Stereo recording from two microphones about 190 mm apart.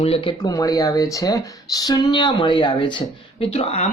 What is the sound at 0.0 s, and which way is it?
Speech, 30° left (ahead or behind).